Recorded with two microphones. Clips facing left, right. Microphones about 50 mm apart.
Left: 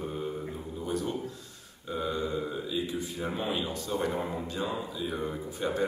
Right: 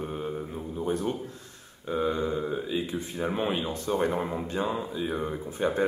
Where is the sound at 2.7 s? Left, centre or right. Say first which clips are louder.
Right 2 dB; right.